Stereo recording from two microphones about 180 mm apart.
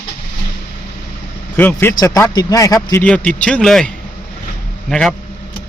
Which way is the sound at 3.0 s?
5° left (ahead or behind).